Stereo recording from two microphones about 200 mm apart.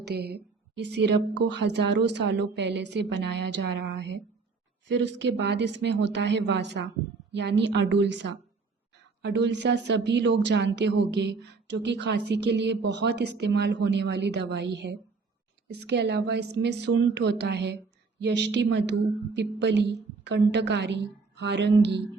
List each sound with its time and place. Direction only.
0.0 s a woman's voice: 55° right (ahead or behind)